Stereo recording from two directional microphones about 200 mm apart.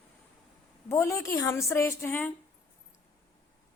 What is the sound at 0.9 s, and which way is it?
A woman's voice, 15° left (ahead or behind).